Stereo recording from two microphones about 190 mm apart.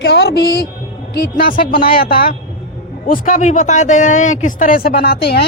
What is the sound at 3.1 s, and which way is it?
A man's voice, 45° left (ahead or behind).